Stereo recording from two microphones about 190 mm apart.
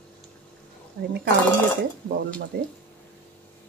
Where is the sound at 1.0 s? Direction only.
60° right (ahead or behind).